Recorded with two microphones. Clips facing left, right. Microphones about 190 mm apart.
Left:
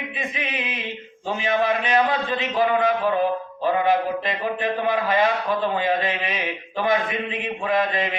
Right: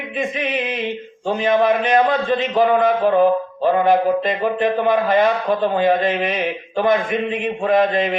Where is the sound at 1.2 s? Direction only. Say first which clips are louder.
Right 6 dB; 50° right (ahead or behind).